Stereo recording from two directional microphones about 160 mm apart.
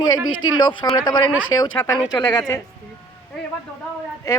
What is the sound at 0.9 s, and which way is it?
Speech, 30° left (ahead or behind).